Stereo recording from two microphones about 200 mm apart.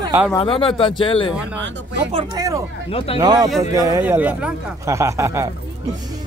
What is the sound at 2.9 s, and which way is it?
Speech, 30° left (ahead or behind).